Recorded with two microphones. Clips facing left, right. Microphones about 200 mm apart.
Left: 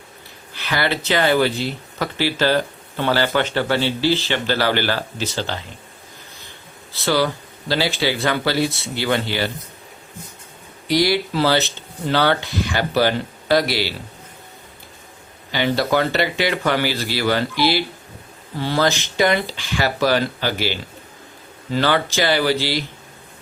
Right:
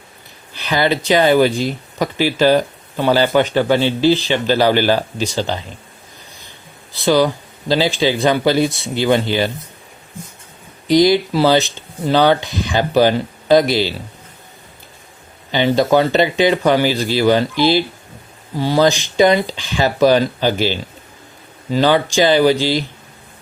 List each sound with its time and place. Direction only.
0.5 s speech: 15° right (ahead or behind)
6.9 s speech: 15° right (ahead or behind)
10.8 s speech: 20° right (ahead or behind)
15.5 s speech: 20° right (ahead or behind)